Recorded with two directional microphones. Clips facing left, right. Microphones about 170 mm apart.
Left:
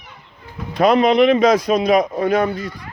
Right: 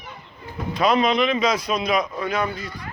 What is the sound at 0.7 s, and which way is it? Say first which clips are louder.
A man's voice: left 6 dB; 55° left (ahead or behind).